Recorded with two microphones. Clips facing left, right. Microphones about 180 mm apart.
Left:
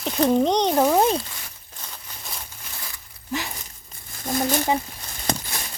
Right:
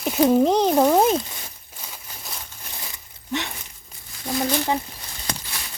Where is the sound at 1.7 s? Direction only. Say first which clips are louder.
Even; 10° right (ahead or behind).